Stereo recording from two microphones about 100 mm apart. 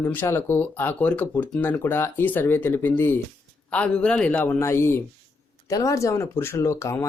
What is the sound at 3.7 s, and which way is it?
Speech, 10° left (ahead or behind).